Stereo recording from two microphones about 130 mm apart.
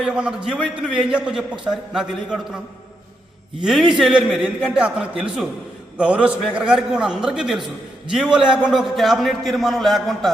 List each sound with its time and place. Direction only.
0.0 s a man's voice: 5° right (ahead or behind)
3.6 s a man's voice: centre (ahead or behind)